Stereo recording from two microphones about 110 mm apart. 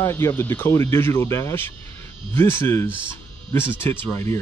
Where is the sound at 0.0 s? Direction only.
20° left (ahead or behind).